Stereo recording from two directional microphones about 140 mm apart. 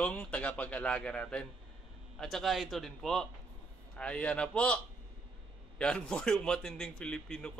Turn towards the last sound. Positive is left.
turn(degrees=5)  # may be behind; listen again after turning